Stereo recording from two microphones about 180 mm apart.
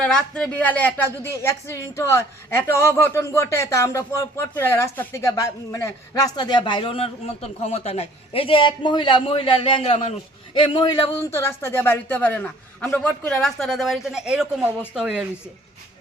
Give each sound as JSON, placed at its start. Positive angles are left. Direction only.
{"t": 0.0, "sound": "speech", "side_deg": 5}